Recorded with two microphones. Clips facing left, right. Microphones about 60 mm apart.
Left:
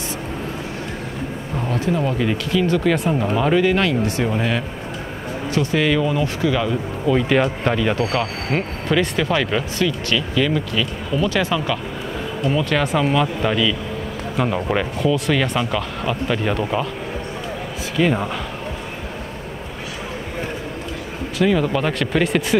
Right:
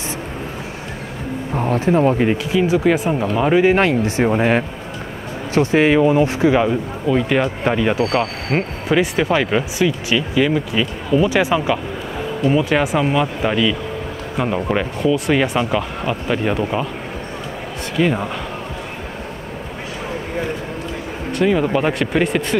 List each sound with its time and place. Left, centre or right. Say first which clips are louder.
1.6 s speech: right 6 dB; right
2.5 s speech: right 1 dB; centre
3.6 s speech: right 3 dB; right
7.1 s speech: even; centre
12.8 s speech: right 1 dB; centre
17.9 s speech: right 1 dB; centre
21.5 s speech: right 2 dB; centre
22.1 s speech: even; centre